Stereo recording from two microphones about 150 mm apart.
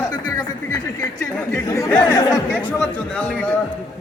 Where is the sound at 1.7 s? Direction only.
20° left (ahead or behind).